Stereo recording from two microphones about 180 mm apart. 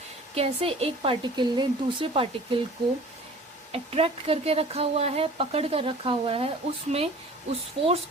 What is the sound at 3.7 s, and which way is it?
Speech, 35° right (ahead or behind).